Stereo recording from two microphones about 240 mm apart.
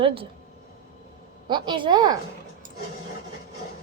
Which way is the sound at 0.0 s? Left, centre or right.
Right.